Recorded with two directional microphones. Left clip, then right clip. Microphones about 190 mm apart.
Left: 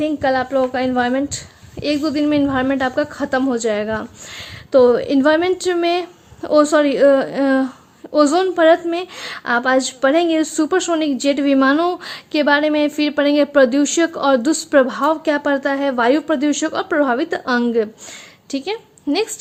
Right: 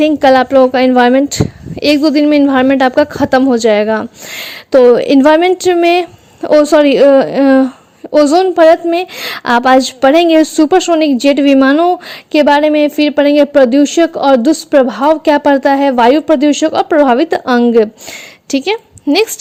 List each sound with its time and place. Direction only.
0.0 s a woman's voice: 45° right (ahead or behind)
18.5 s a woman's voice: 45° right (ahead or behind)
19.1 s a woman's voice: 30° right (ahead or behind)